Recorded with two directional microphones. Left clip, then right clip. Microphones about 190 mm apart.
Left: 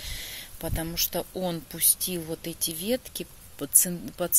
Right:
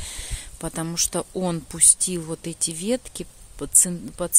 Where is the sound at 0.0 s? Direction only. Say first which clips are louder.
Right 1 dB; 45° right (ahead or behind).